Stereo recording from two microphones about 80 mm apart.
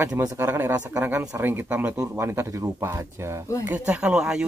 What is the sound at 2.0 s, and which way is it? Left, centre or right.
Speech, right.